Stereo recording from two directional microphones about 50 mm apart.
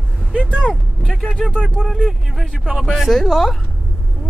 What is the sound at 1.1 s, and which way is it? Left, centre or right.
Speech, centre.